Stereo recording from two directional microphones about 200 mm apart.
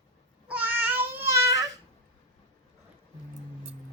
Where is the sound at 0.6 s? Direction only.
10° right (ahead or behind).